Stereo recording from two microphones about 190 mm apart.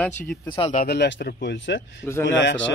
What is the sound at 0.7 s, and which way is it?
Speech, 50° left (ahead or behind).